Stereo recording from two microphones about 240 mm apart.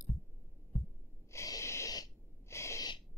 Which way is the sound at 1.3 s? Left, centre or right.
Centre.